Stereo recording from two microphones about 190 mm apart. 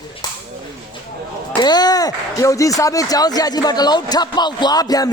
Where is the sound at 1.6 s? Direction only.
20° left (ahead or behind).